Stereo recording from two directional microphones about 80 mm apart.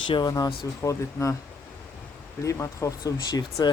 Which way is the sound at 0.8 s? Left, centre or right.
Left.